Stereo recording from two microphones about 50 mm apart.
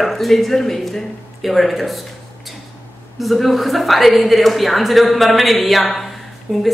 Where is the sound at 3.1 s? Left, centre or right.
Centre.